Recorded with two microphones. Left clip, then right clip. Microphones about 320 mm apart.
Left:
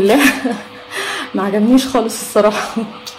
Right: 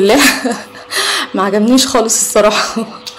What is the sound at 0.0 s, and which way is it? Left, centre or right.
Speech, right.